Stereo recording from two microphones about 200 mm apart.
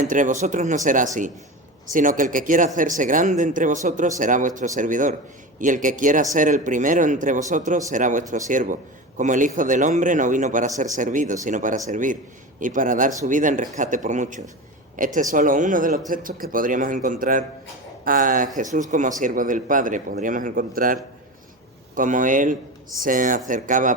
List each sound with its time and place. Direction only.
0.0 s speech: 40° right (ahead or behind)